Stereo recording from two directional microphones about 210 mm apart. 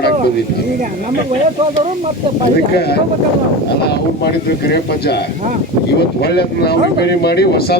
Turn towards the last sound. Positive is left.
turn(degrees=50)  # may be behind; listen again after turning